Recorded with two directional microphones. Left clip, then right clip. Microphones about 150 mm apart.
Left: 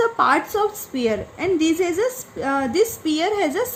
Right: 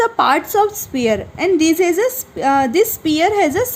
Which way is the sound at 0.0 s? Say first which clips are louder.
Right 3 dB; 55° right (ahead or behind).